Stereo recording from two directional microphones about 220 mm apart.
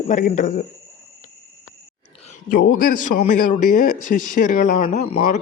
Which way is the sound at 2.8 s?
40° left (ahead or behind).